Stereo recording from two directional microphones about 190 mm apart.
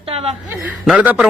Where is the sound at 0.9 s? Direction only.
5° right (ahead or behind).